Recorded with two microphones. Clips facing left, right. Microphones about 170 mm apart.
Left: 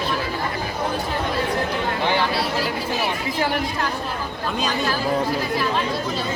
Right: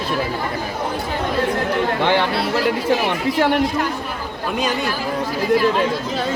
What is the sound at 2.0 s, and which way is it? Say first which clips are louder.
Speech: right 3 dB; 65° right (ahead or behind).